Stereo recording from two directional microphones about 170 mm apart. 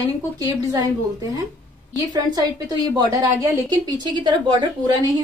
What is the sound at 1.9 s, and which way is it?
A woman's voice, 20° right (ahead or behind).